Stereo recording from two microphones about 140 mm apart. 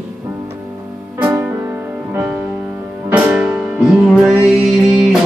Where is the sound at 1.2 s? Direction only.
15° right (ahead or behind).